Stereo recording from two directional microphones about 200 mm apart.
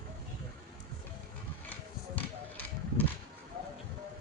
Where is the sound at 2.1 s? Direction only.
10° left (ahead or behind).